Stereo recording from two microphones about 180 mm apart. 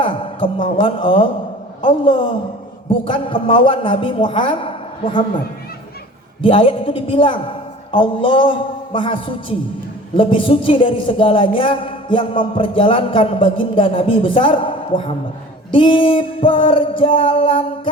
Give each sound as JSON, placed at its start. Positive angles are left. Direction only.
{"t": 0.0, "sound": "a man's voice", "side_deg": 30}
{"t": 6.4, "sound": "a woman's voice", "side_deg": 30}